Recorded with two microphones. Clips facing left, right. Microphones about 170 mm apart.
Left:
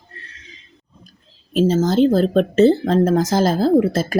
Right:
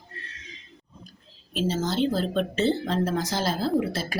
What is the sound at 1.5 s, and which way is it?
A woman's voice, 45° left (ahead or behind).